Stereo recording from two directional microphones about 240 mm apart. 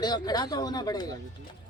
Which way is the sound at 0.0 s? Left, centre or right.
Centre.